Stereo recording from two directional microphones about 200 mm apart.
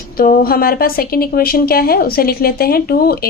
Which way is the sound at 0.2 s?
45° left (ahead or behind).